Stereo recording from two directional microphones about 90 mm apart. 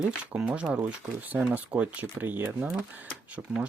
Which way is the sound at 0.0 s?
10° right (ahead or behind).